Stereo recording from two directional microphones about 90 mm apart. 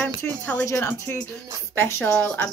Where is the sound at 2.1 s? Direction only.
15° left (ahead or behind).